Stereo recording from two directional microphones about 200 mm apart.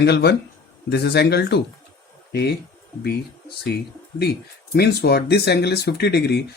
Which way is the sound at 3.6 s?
55° left (ahead or behind).